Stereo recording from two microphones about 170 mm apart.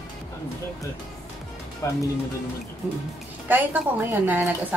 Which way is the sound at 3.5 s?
10° right (ahead or behind).